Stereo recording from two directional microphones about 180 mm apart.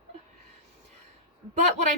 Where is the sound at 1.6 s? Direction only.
40° right (ahead or behind).